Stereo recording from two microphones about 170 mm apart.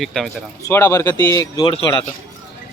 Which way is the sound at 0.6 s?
15° left (ahead or behind).